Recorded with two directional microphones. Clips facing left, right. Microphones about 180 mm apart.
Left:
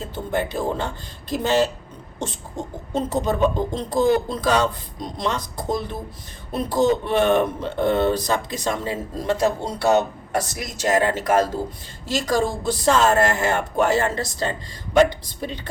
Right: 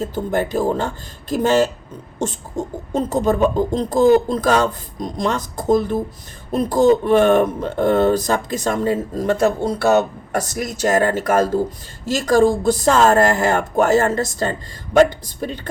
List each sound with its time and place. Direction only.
0.0 s speech: 40° right (ahead or behind)
2.9 s speech: 45° right (ahead or behind)